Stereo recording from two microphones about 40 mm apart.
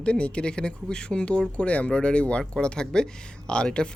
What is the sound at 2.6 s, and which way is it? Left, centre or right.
Speech, left.